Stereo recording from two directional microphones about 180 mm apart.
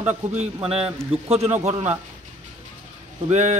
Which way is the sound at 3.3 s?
40° right (ahead or behind).